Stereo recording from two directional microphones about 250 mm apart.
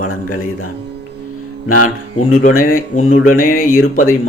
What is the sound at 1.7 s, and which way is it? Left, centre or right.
Speech, left.